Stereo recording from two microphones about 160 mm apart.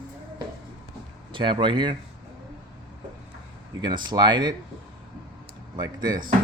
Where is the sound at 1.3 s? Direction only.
30° right (ahead or behind).